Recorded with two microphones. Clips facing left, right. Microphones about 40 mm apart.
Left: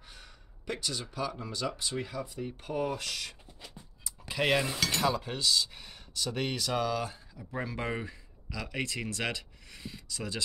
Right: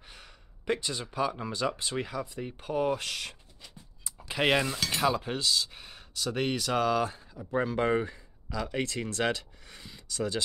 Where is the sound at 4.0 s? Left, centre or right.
Right.